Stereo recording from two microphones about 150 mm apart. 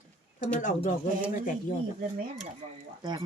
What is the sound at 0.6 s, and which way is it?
Speech, 60° left (ahead or behind).